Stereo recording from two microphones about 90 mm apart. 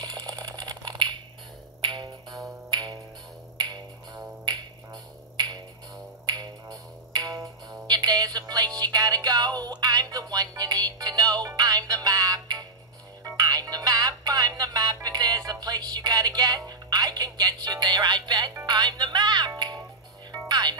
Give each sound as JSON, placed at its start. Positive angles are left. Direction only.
{"t": 0.0, "sound": "rattle", "side_deg": -50}
{"t": 1.8, "sound": "music", "side_deg": -55}
{"t": 6.2, "sound": "music", "side_deg": -55}
{"t": 18.7, "sound": "speech", "side_deg": -50}
{"t": 20.2, "sound": "music", "side_deg": -50}